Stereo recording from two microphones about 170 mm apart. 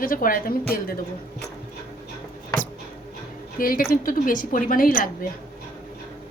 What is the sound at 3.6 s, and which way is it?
A woman's voice, 55° left (ahead or behind).